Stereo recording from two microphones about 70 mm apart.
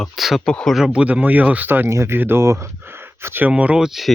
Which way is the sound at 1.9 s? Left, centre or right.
Right.